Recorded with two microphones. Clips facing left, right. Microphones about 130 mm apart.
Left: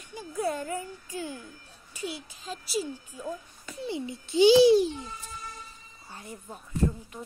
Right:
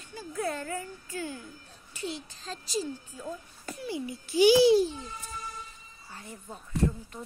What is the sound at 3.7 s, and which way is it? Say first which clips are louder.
Speech: left 2 dB; 25° left (ahead or behind).